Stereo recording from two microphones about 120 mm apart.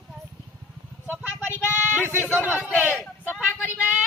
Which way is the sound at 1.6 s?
20° left (ahead or behind).